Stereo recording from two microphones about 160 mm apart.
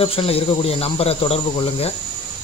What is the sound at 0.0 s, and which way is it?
Speech, 35° left (ahead or behind).